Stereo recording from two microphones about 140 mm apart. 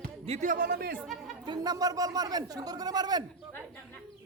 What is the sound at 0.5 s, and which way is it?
Speech, 90° right.